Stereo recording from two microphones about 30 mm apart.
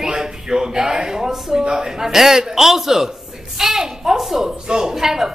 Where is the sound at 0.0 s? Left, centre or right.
Right.